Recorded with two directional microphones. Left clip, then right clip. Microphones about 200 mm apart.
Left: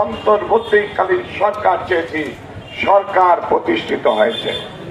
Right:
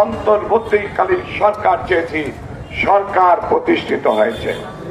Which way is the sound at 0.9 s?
45° left (ahead or behind).